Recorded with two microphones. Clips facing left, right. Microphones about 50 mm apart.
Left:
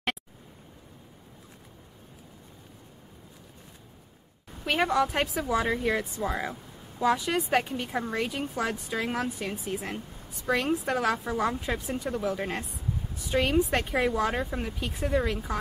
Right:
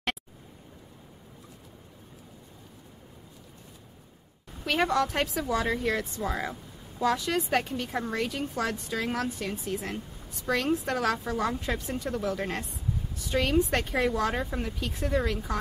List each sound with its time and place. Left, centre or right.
4.6 s speech: centre